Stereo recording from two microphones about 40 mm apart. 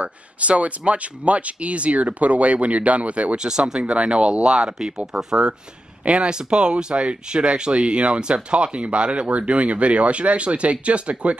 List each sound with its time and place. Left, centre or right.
0.0 s speech: right
3.3 s speech: centre